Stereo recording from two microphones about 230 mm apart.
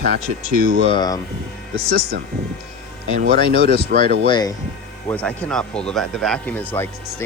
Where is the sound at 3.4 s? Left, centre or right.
Left.